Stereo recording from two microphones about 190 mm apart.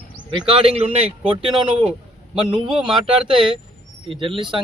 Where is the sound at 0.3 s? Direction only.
30° right (ahead or behind).